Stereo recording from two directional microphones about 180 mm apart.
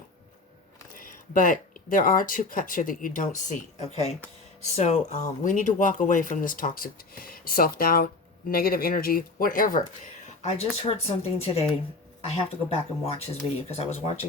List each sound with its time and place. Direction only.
0.9 s speech: 50° left (ahead or behind)
10.4 s speech: 35° left (ahead or behind)